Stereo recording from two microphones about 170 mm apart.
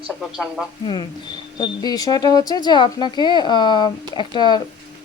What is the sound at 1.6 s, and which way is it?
Speech, 20° left (ahead or behind).